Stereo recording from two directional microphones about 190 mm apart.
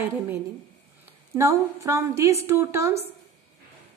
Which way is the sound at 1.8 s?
15° right (ahead or behind).